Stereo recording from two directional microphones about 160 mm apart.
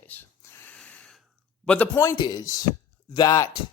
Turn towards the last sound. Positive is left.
turn(degrees=25)  # may be behind; listen again after turning